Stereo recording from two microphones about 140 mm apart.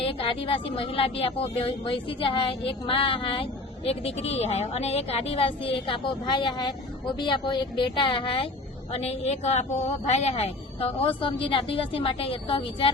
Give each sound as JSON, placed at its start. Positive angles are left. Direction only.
{"t": 0.0, "sound": "a woman's voice", "side_deg": 40}
{"t": 8.9, "sound": "a woman's voice", "side_deg": 50}